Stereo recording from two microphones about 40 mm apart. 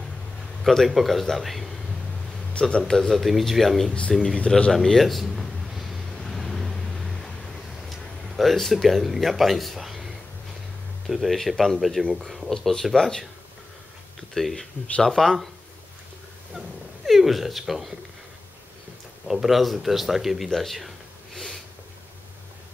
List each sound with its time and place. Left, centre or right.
0.7 s speech: centre
2.6 s a man's voice: left
2.9 s speech: centre
4.7 s a sound: centre
6.3 s vehicle: centre
8.4 s speech: centre
12.4 s speech: centre
14.3 s speech: centre
16.5 s speech: centre
19.2 s speech: centre
20.4 s speech: centre